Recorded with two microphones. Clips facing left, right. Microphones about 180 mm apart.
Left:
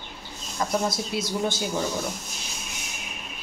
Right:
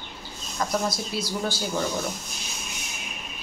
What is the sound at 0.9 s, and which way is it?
Speech, 25° left (ahead or behind).